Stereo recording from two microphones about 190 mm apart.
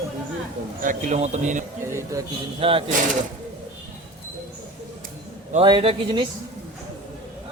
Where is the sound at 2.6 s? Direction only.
30° right (ahead or behind).